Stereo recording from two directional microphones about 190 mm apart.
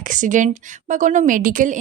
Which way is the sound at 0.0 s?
45° right (ahead or behind).